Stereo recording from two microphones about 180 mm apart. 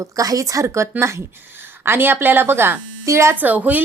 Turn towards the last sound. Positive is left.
turn(degrees=-10)  # may be behind; listen again after turning